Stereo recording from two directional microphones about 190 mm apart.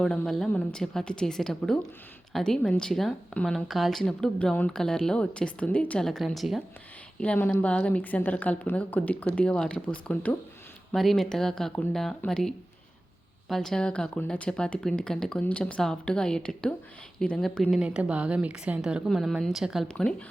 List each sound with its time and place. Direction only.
0.0 s a woman's voice: centre (ahead or behind)